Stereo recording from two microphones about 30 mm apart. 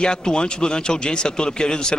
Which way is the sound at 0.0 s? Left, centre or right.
Left.